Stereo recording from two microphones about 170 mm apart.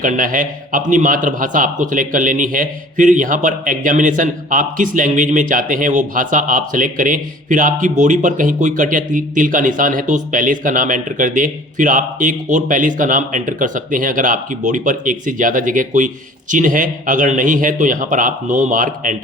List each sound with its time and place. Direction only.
0.0 s a man's voice: 50° right (ahead or behind)